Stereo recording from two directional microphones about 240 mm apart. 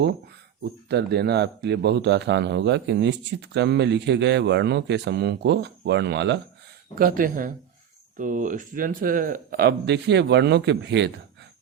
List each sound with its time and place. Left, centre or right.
0.6 s speech: right
6.9 s speech: right